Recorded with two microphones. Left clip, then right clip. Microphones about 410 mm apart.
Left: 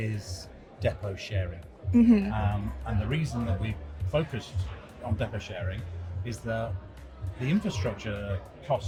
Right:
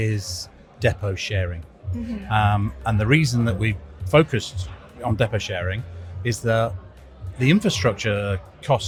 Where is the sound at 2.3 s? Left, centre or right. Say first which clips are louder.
Right 13 dB; right.